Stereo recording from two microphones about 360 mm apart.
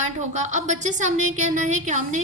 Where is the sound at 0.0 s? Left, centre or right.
Centre.